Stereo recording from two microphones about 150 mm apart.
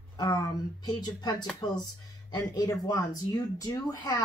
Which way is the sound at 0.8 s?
30° left (ahead or behind).